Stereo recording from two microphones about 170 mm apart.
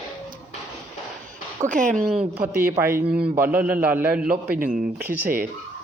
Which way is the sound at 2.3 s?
10° right (ahead or behind).